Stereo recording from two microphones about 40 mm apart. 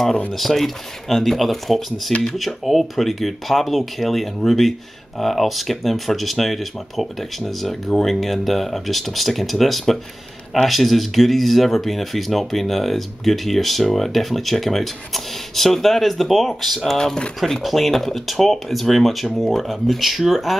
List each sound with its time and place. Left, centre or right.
0.3 s speech: centre
16.9 s speech: centre
17.6 s speech: centre